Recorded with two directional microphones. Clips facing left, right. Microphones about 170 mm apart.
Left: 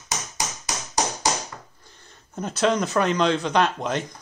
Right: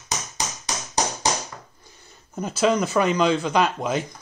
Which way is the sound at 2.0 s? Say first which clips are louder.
Right 1 dB; centre (ahead or behind).